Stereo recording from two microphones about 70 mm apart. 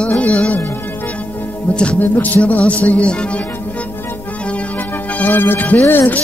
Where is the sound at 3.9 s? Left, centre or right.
Left.